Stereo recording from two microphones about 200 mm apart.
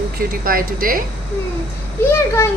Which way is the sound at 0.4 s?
45° right (ahead or behind).